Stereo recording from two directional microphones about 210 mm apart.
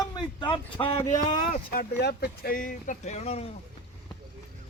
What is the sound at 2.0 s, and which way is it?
Speech, 50° left (ahead or behind).